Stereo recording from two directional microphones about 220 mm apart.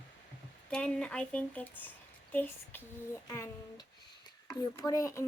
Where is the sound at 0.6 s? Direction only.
5° left (ahead or behind).